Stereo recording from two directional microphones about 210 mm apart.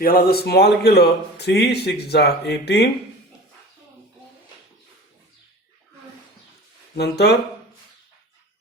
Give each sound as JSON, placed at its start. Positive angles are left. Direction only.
{"t": 0.0, "sound": "speech", "side_deg": 45}
{"t": 6.9, "sound": "speech", "side_deg": 50}